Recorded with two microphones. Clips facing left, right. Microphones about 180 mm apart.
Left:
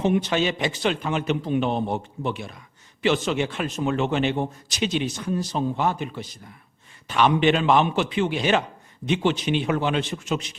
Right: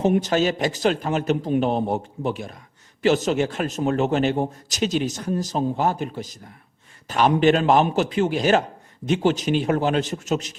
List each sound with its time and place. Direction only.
0.0 s a man's voice: 40° right (ahead or behind)